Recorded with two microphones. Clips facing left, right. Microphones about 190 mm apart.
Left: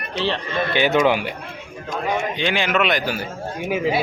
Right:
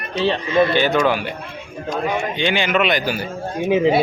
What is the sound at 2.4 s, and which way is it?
Speech, centre (ahead or behind).